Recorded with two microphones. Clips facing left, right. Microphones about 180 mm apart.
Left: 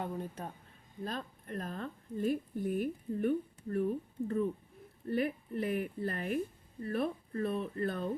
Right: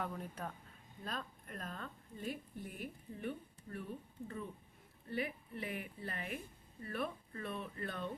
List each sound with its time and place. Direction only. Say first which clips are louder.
0.0 s speech: left 4 dB; 25° left (ahead or behind)
2.2 s speech: left 11 dB; 50° left (ahead or behind)